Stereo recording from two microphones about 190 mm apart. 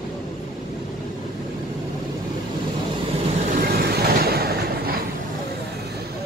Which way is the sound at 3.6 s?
55° right (ahead or behind).